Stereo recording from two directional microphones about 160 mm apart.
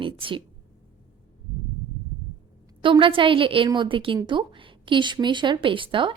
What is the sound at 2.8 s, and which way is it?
A woman's voice, 30° right (ahead or behind).